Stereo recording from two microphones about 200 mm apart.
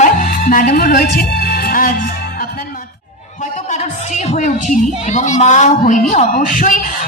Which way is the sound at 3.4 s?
35° left (ahead or behind).